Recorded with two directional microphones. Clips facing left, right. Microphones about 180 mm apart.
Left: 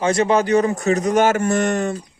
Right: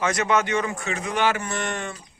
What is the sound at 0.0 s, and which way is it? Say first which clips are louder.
Speech: left 6 dB; 30° left (ahead or behind).